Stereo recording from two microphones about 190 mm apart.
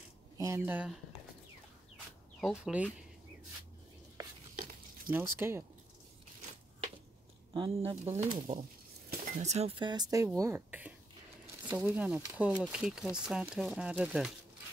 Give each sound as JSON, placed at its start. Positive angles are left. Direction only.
{"t": 0.4, "sound": "speech", "side_deg": -10}
{"t": 2.4, "sound": "speech", "side_deg": -5}
{"t": 5.1, "sound": "speech", "side_deg": -10}
{"t": 7.5, "sound": "speech", "side_deg": -30}